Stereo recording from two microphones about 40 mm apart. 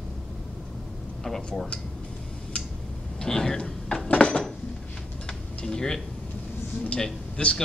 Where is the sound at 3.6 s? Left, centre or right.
Left.